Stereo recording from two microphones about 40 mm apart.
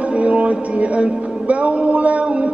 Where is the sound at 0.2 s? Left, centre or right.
Right.